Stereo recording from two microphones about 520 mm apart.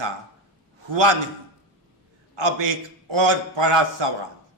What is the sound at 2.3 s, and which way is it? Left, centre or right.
Speech, right.